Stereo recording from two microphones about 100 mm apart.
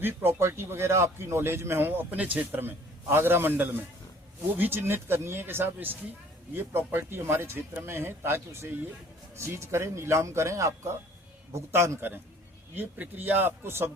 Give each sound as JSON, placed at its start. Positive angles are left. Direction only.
{"t": 0.0, "sound": "a man's voice", "side_deg": -25}